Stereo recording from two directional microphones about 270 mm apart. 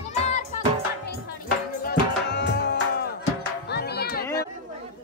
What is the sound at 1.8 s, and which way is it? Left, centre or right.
Tabla, left.